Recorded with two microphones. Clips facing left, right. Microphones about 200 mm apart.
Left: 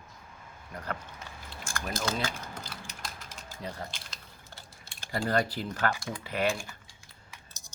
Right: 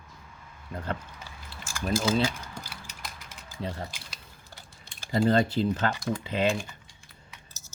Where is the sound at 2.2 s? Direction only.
10° right (ahead or behind).